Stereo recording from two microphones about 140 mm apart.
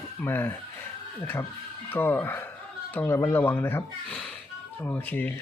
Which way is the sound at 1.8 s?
15° left (ahead or behind).